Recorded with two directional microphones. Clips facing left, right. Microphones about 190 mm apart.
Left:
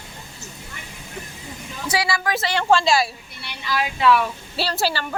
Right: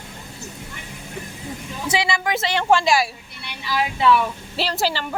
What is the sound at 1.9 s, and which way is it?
Speech, 20° right (ahead or behind).